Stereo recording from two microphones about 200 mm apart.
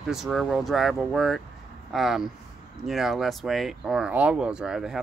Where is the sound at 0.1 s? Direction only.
Centre (ahead or behind).